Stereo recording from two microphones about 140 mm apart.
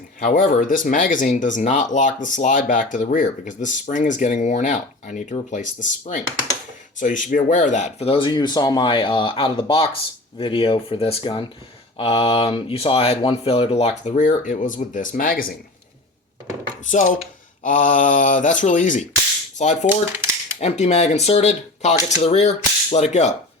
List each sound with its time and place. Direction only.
0.2 s speech: 75° left (ahead or behind); by 14.1 s 45° left (ahead or behind)
14.2 s speech: 65° left (ahead or behind); by 15.5 s 90° left
16.8 s speech: 65° left (ahead or behind)